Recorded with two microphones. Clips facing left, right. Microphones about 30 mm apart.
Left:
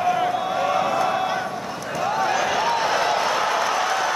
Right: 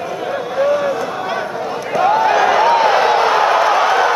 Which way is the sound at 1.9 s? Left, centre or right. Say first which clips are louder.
Right 9 dB; right.